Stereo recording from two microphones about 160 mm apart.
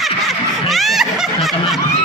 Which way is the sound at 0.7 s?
Centre (ahead or behind).